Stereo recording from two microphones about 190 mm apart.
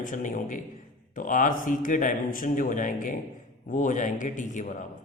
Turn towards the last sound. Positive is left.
turn(degrees=40)  # may be behind; listen again after turning